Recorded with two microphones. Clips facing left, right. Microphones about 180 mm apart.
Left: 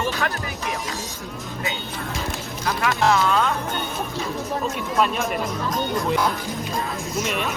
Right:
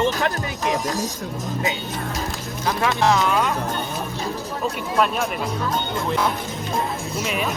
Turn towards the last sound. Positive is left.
turn(degrees=-25)  # may be behind; listen again after turning